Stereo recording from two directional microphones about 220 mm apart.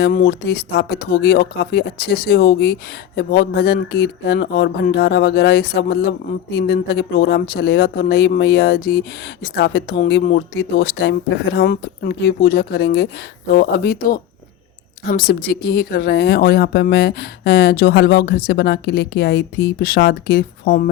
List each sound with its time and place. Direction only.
0.0 s speech: 45° left (ahead or behind)